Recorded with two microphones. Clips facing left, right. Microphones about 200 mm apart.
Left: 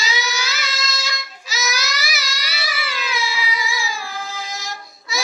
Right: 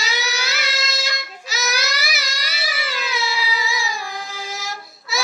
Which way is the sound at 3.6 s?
20° right (ahead or behind).